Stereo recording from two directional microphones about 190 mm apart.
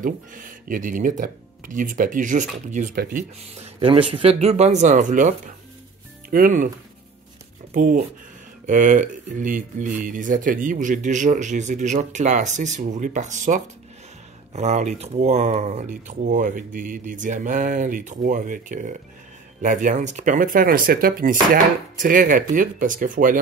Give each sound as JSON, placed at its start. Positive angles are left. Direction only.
{"t": 0.0, "sound": "speech", "side_deg": -45}
{"t": 7.7, "sound": "speech", "side_deg": -45}